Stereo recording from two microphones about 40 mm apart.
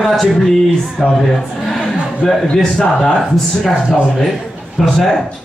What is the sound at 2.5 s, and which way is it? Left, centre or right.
Speech, centre.